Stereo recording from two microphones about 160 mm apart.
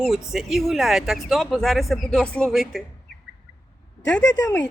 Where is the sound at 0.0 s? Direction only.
Centre (ahead or behind).